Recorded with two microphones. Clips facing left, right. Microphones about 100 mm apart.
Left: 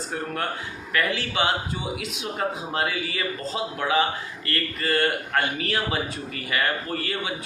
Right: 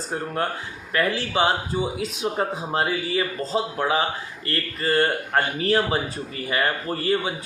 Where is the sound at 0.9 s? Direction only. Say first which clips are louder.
Right 3 dB; 35° right (ahead or behind).